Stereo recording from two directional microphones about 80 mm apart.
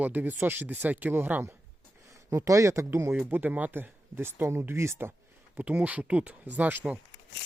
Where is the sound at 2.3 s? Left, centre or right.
Right.